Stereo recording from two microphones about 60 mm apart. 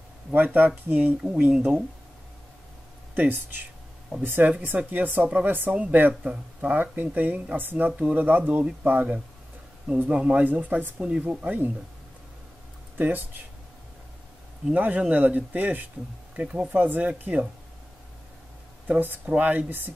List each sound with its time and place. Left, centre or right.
0.3 s speech: right
3.2 s speech: right
12.9 s speech: right
14.7 s speech: right
18.9 s speech: right